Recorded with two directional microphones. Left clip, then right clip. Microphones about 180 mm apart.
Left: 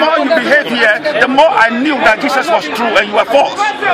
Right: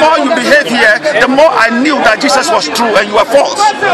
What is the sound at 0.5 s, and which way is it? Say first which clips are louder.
A man's voice: right 5 dB; 15° right (ahead or behind).